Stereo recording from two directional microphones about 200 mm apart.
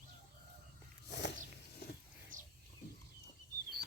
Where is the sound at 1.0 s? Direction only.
60° left (ahead or behind).